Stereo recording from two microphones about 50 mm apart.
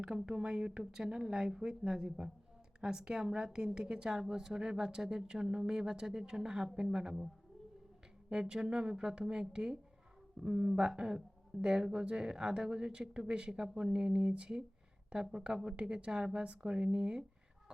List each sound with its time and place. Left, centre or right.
0.0 s speech: centre
8.3 s a woman's voice: centre